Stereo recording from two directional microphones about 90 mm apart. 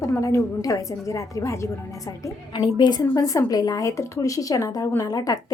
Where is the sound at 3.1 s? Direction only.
40° left (ahead or behind).